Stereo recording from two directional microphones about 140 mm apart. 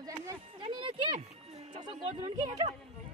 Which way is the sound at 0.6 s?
35° right (ahead or behind).